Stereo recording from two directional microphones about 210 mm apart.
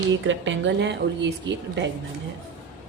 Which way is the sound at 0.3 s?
60° right (ahead or behind).